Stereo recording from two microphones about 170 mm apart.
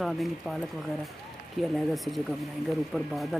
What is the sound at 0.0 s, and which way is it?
Speech, centre (ahead or behind).